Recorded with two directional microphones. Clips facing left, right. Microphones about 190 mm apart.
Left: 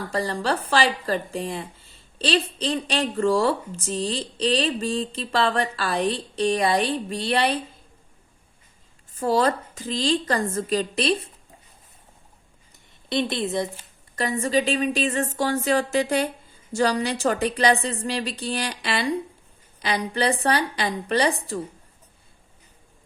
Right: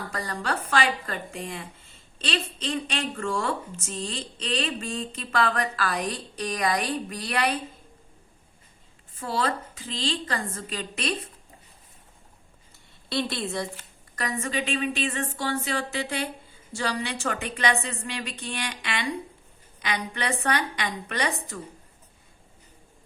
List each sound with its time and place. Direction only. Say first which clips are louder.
0.1 s speech: left 7 dB; 30° left (ahead or behind)
9.1 s speech: left 7 dB; 40° left (ahead or behind)
13.1 s a woman's voice: left 4 dB; 20° left (ahead or behind)
14.2 s speech: left 7 dB; 30° left (ahead or behind)